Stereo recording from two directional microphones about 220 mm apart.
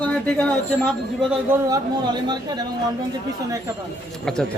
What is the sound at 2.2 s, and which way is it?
Speech, 20° right (ahead or behind).